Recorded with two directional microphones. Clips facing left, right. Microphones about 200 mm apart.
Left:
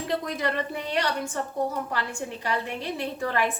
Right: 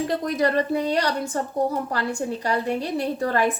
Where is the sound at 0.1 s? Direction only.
40° right (ahead or behind).